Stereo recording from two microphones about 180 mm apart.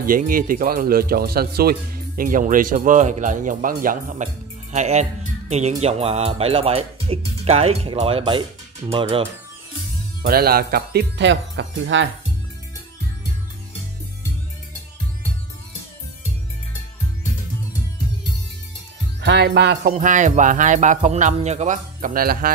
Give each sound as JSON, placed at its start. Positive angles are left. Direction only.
{"t": 0.0, "sound": "speech", "side_deg": -50}
{"t": 10.2, "sound": "speech", "side_deg": -55}
{"t": 19.2, "sound": "speech", "side_deg": -65}
{"t": 19.9, "sound": "speech", "side_deg": -45}